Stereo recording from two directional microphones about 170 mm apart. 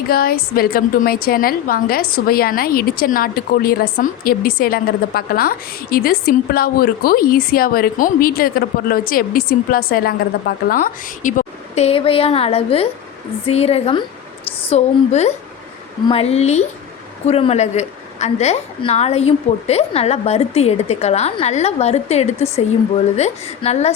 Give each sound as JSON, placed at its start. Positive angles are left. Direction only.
{"t": 0.1, "sound": "a woman's voice", "side_deg": 60}